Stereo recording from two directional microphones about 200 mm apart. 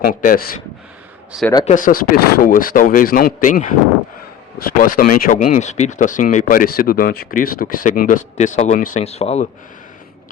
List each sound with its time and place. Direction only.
0.0 s speech: 40° left (ahead or behind)
1.6 s speech: 40° left (ahead or behind)